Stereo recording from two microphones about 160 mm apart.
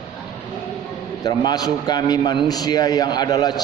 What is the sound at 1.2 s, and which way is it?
A man's voice, 25° left (ahead or behind).